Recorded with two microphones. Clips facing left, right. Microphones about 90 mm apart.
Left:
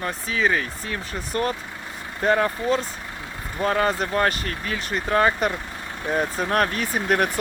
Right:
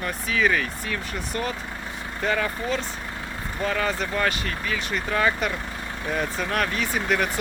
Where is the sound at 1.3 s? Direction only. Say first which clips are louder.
Left 5 dB; 40° left (ahead or behind).